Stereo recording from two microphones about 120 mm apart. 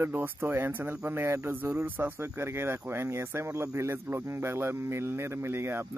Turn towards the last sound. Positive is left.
turn(degrees=-20)  # may be behind; listen again after turning